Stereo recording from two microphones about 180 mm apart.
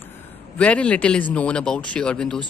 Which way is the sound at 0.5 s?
5° left (ahead or behind).